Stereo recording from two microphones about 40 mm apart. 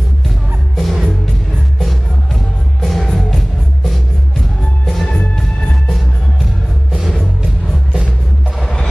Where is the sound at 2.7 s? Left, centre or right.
Centre.